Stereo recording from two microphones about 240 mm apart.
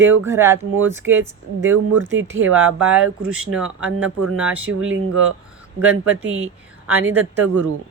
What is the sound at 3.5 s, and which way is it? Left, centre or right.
Speech, centre.